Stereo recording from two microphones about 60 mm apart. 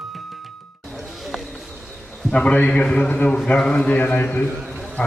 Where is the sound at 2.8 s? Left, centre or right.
Centre.